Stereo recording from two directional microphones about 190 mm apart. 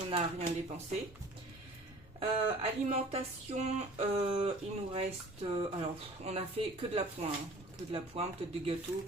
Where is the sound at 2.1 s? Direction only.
30° right (ahead or behind).